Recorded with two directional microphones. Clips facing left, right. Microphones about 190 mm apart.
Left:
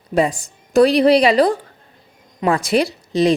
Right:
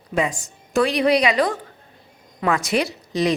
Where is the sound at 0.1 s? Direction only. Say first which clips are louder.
Left 5 dB; 35° left (ahead or behind).